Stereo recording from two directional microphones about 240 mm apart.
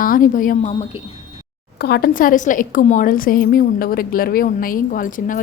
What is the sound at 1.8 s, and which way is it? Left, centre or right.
A woman's voice, left.